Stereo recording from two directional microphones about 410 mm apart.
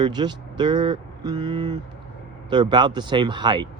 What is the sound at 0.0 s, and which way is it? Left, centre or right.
Speech, centre.